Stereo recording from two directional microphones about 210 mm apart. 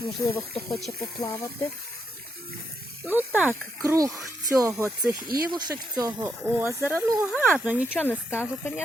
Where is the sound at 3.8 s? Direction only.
15° right (ahead or behind).